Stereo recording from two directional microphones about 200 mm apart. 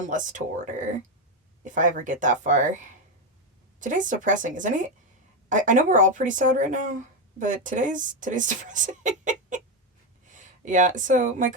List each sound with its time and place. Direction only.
0.1 s speech: 40° right (ahead or behind)